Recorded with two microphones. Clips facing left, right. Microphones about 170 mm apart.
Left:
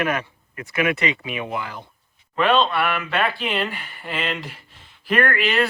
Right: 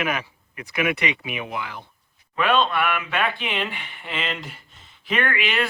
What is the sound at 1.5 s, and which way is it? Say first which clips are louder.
Speech: left 2 dB; centre (ahead or behind).